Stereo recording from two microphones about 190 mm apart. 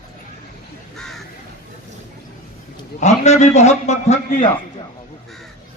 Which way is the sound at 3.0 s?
35° left (ahead or behind).